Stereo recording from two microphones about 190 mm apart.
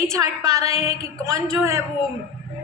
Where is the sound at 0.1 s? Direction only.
15° right (ahead or behind).